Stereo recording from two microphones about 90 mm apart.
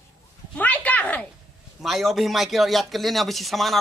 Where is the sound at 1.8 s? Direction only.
Centre (ahead or behind).